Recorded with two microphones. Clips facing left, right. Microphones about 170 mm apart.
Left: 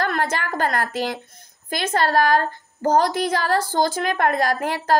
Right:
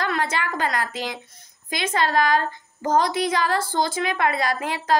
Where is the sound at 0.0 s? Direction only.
45° left (ahead or behind).